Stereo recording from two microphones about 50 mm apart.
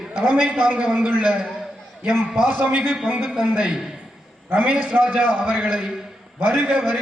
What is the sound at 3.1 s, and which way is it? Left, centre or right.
A man's voice, centre.